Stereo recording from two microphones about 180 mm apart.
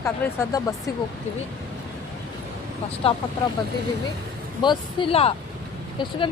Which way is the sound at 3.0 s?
30° left (ahead or behind).